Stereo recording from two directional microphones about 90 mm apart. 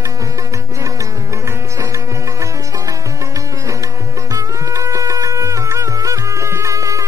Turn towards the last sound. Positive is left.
turn(degrees=-35)  # may be behind; listen again after turning